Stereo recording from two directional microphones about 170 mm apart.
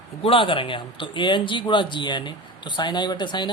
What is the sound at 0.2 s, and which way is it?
A woman's voice, 30° left (ahead or behind).